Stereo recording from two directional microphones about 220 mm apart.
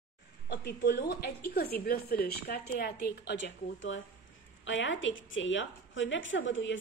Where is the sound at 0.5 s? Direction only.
50° left (ahead or behind).